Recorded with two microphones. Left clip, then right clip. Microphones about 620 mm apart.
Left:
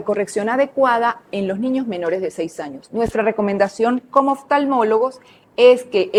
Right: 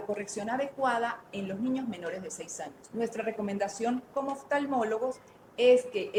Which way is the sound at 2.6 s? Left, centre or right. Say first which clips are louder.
Left 13 dB; left.